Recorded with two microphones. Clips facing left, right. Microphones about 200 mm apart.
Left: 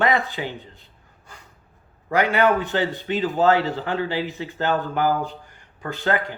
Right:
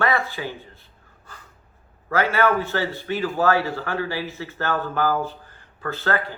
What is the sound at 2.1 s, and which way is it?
Speech, 15° left (ahead or behind).